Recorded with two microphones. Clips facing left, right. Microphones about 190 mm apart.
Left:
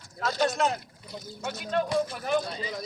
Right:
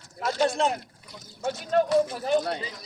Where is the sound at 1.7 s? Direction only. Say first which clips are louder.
Right 5 dB; 40° right (ahead or behind).